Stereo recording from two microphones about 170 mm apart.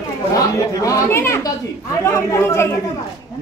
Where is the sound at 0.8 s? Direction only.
15° left (ahead or behind).